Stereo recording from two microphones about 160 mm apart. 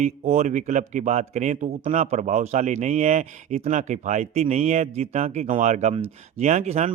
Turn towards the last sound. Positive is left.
turn(degrees=-45)  # may be behind; listen again after turning